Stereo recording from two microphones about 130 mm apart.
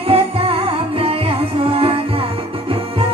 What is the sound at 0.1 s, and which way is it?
Music, 45° right (ahead or behind).